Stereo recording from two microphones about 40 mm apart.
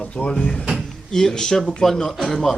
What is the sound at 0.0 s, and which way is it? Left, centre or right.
Speech, left.